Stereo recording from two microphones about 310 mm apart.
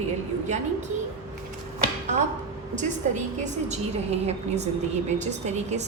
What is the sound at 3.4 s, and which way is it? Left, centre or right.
A woman's voice, right.